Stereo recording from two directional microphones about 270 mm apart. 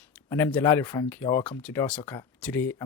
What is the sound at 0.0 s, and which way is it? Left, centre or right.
Speech, centre.